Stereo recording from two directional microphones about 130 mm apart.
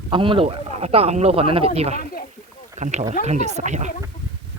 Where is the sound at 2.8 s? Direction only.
65° right (ahead or behind).